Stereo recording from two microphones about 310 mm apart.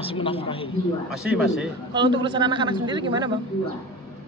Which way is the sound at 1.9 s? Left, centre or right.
Centre.